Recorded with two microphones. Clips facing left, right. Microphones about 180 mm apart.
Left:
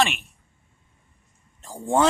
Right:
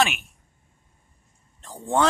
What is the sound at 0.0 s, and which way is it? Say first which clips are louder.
Speech: even; centre (ahead or behind).